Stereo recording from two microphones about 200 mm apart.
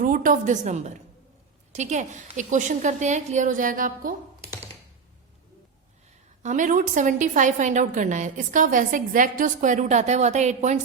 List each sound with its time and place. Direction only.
0.0 s a woman's voice: 40° right (ahead or behind)
6.4 s a woman's voice: 40° right (ahead or behind)